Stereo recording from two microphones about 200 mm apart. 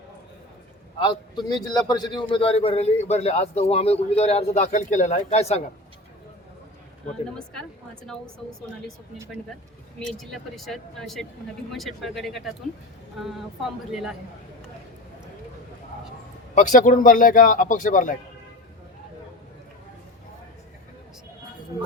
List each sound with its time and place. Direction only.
1.0 s a man's voice: 20° left (ahead or behind)
7.1 s speech: 5° left (ahead or behind)
10.0 s speech: centre (ahead or behind)
16.6 s a man's voice: 40° left (ahead or behind)